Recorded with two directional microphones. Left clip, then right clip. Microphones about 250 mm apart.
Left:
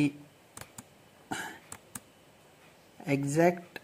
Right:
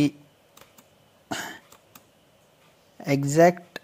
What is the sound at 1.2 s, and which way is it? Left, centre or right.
Cough, right.